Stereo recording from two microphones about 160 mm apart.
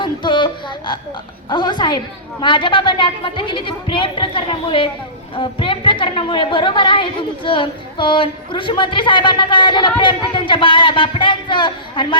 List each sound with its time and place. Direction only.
0.0 s a woman's voice: 30° left (ahead or behind)